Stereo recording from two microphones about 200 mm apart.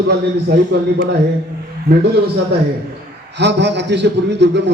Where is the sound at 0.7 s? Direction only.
55° right (ahead or behind).